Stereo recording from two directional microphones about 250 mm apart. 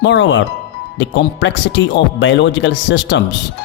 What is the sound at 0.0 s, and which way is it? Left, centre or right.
Speech, left.